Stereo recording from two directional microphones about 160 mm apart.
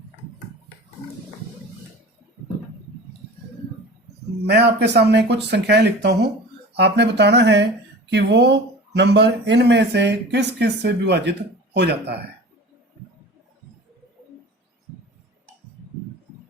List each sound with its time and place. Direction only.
4.4 s speech: 90° right